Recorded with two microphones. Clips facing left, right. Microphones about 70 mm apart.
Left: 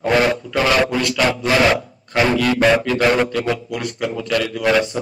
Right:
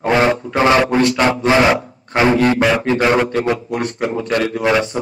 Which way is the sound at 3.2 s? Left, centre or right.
Right.